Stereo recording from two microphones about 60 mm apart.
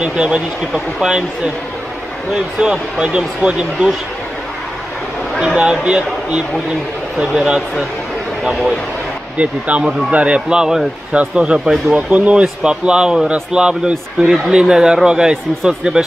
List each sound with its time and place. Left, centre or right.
0.0 s speech: centre
5.6 s speech: centre
7.2 s speech: centre
9.4 s speech: right